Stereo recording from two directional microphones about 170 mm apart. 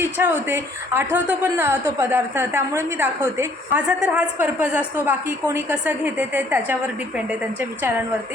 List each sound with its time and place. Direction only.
0.0 s a woman's voice: 10° right (ahead or behind)